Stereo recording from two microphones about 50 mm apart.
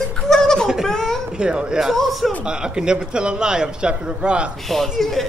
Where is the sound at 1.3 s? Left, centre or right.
Centre.